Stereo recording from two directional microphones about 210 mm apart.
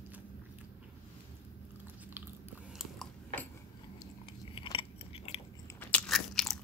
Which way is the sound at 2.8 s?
5° left (ahead or behind).